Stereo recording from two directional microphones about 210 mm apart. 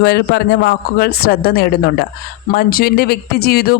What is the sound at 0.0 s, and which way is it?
Speech, 50° left (ahead or behind).